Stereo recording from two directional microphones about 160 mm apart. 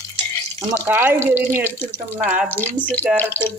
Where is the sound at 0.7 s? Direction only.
10° right (ahead or behind).